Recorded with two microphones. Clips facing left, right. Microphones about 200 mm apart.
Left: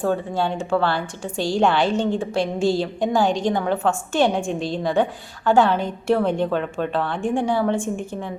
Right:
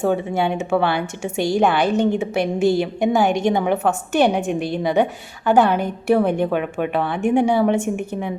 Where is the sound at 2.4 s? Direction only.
60° right (ahead or behind).